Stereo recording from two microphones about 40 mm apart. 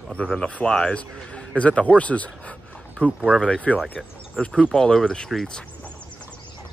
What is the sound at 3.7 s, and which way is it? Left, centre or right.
Speech, left.